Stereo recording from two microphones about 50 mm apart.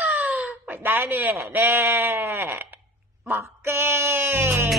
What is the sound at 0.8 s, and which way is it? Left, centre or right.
A man's voice, right.